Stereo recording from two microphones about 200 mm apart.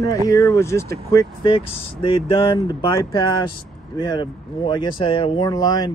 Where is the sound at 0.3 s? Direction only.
15° left (ahead or behind).